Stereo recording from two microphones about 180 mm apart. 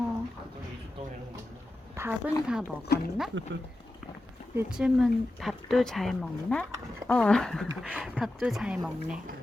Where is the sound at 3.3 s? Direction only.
90° right.